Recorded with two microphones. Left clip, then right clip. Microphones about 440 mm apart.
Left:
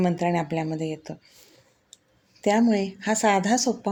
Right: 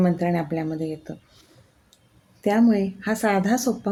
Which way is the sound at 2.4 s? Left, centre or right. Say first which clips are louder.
Right 1 dB; right.